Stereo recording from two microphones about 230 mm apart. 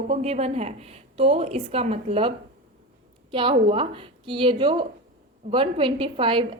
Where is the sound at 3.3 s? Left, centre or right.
Right.